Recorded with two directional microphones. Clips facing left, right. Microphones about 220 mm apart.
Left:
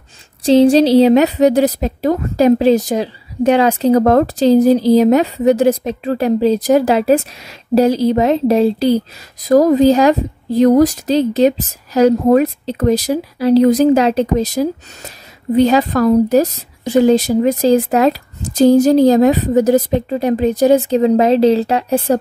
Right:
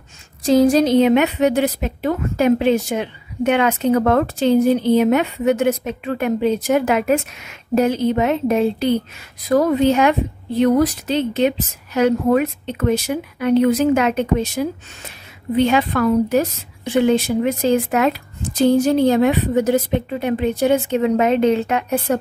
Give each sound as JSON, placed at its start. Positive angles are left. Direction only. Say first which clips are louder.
{"t": 0.4, "sound": "a woman's voice", "louder": "left 4 dB", "side_deg": 30}